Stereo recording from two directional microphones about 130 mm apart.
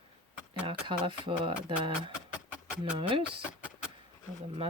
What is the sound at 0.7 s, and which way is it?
Speech, 40° right (ahead or behind).